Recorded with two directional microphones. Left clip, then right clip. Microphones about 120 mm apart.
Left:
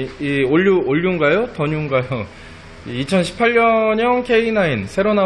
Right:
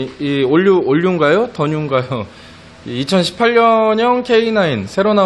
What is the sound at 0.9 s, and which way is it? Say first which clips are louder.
A man's voice: right 3 dB; 50° right (ahead or behind).